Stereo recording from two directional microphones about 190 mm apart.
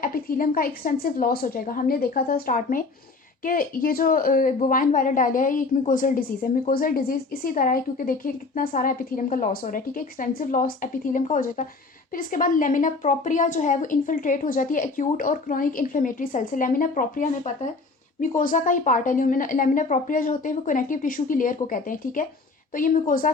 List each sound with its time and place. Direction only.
0.0 s a woman's voice: 50° left (ahead or behind)